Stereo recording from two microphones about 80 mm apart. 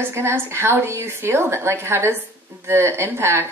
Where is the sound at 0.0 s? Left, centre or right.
Right.